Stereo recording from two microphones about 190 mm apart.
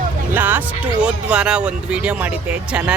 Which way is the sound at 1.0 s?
5° right (ahead or behind).